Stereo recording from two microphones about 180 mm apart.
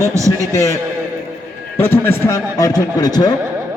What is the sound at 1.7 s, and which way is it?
A man's voice, 10° left (ahead or behind).